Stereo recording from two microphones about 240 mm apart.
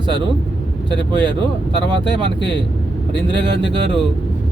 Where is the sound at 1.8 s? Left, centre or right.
Right.